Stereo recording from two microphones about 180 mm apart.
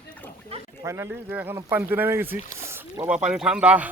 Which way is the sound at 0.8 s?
15° right (ahead or behind).